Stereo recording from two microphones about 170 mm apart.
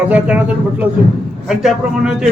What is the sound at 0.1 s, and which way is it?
A man's voice, 10° right (ahead or behind).